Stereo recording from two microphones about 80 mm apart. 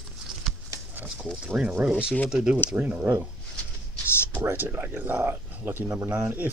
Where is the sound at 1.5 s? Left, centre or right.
Centre.